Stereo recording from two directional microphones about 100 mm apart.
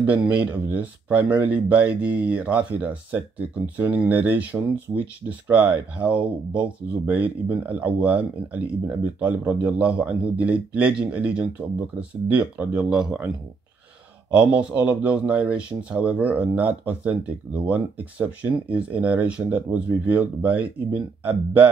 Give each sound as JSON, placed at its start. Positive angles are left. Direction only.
{"t": 0.0, "sound": "speech", "side_deg": -15}
{"t": 14.3, "sound": "speech", "side_deg": -15}